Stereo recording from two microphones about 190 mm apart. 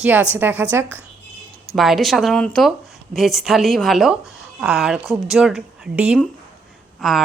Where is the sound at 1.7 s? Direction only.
Centre (ahead or behind).